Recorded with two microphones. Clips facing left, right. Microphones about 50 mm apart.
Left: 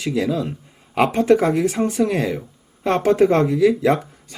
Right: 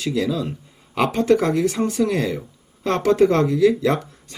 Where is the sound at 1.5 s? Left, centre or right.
Left.